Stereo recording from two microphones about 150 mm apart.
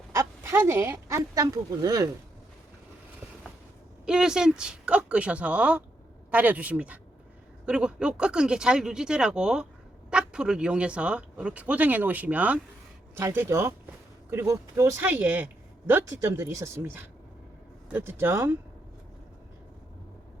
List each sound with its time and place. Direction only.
0.1 s speech: 20° right (ahead or behind)
4.0 s speech: 5° right (ahead or behind)